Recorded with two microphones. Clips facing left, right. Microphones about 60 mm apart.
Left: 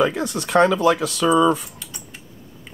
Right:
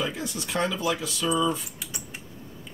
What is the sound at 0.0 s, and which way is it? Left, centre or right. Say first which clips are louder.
Speech: left 10 dB; left.